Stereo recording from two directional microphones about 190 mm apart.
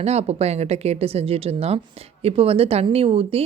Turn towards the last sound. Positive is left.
turn(degrees=-30)  # may be behind; listen again after turning